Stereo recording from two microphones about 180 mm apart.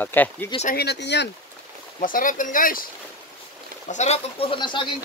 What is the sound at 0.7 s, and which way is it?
Speech, 65° left (ahead or behind).